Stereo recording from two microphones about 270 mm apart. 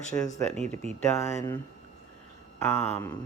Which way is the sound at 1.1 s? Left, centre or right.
Centre.